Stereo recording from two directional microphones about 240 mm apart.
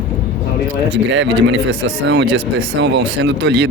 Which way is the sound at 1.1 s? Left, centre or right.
Right.